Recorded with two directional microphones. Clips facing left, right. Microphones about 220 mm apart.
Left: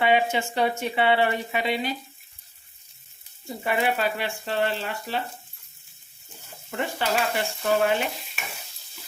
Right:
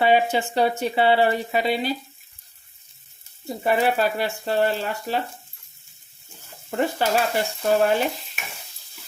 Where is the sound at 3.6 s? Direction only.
40° right (ahead or behind).